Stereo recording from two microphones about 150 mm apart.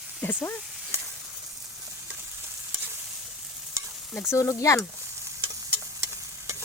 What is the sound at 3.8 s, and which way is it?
Stir, 20° right (ahead or behind).